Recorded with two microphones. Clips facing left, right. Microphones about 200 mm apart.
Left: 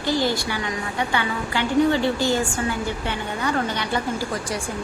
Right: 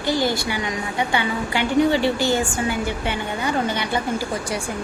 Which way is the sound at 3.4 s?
20° right (ahead or behind).